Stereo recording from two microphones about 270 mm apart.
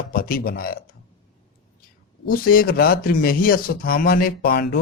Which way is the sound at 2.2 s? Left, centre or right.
Left.